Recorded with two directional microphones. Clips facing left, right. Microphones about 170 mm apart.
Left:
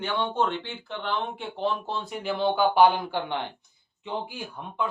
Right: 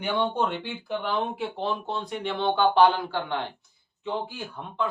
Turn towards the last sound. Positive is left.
turn(degrees=15)  # may be behind; listen again after turning